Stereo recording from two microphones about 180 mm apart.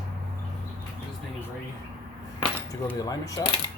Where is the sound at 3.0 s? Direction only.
20° left (ahead or behind).